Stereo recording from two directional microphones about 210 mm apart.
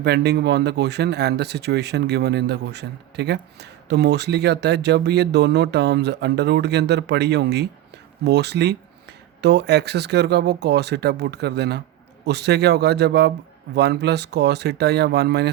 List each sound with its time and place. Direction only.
0.0 s speech: 50° right (ahead or behind)